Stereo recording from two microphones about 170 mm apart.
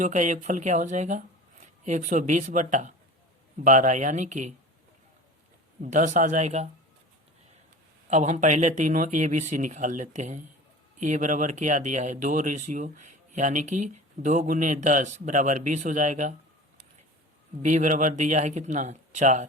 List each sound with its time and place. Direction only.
0.0 s speech: 45° right (ahead or behind)
5.8 s speech: 45° right (ahead or behind)
8.1 s speech: 45° right (ahead or behind)
17.6 s speech: 45° right (ahead or behind)